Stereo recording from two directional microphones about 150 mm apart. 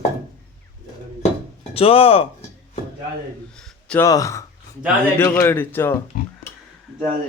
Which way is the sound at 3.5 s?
5° left (ahead or behind).